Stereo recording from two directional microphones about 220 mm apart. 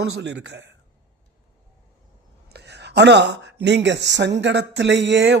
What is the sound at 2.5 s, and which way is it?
A man's voice, 50° right (ahead or behind).